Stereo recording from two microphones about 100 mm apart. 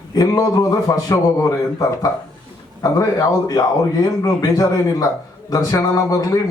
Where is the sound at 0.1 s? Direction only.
40° left (ahead or behind).